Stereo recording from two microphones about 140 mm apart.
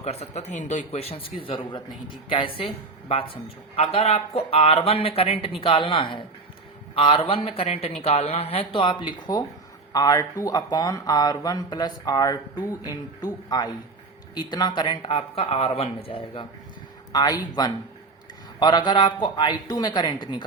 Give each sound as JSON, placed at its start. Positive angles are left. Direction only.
{"t": 0.0, "sound": "speech", "side_deg": 50}
{"t": 17.1, "sound": "speech", "side_deg": 30}